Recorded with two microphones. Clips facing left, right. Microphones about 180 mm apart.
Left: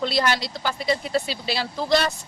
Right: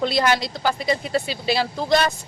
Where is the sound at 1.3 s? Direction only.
50° right (ahead or behind).